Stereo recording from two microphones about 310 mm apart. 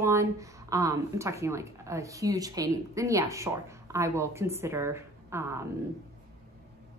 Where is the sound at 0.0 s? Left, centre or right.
Centre.